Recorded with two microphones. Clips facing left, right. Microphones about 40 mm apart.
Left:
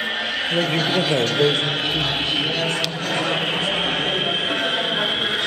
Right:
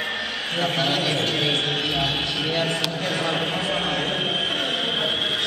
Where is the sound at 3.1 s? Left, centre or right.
Left.